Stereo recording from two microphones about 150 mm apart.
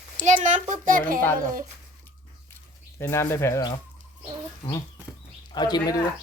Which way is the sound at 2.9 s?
20° left (ahead or behind).